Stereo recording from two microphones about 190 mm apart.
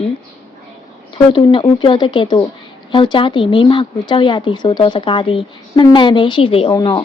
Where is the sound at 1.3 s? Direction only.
25° left (ahead or behind).